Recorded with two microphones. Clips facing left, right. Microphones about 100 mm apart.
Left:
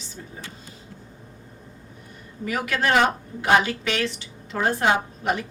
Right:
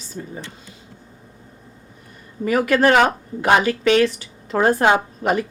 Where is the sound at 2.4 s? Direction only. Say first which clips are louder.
Right 8 dB; 50° right (ahead or behind).